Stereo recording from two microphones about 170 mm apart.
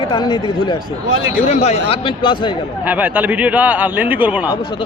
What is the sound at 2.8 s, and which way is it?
A man's voice, 10° right (ahead or behind).